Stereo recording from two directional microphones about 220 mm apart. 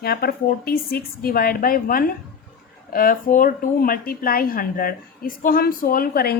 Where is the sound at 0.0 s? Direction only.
45° left (ahead or behind).